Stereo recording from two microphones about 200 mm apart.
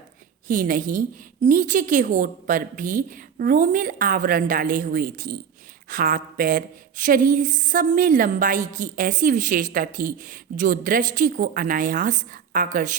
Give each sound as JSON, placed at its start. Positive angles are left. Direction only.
{"t": 0.4, "sound": "a woman's voice", "side_deg": -45}